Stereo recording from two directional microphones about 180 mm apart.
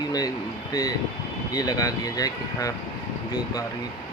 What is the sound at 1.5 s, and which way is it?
Speech, 20° left (ahead or behind).